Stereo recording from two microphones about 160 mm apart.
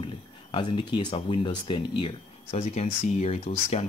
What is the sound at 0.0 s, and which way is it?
Speech, 30° left (ahead or behind).